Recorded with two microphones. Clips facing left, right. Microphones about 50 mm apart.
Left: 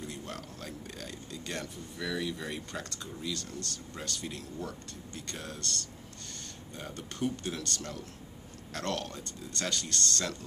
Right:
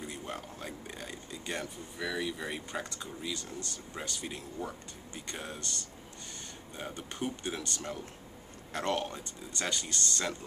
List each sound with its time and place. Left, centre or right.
0.0 s speech: centre